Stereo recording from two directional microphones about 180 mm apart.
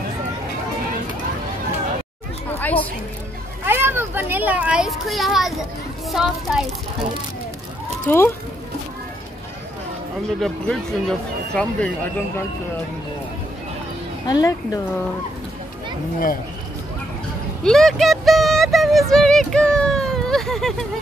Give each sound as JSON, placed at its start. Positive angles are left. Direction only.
{"t": 2.6, "sound": "music", "side_deg": 10}
{"t": 3.6, "sound": "a child's voice", "side_deg": -10}
{"t": 8.1, "sound": "speech", "side_deg": 10}
{"t": 10.4, "sound": "speech", "side_deg": 0}
{"t": 14.2, "sound": "speech", "side_deg": 20}
{"t": 17.6, "sound": "speech", "side_deg": 0}